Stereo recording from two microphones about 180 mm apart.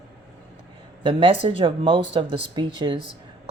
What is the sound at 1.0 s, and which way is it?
Speech, 30° right (ahead or behind).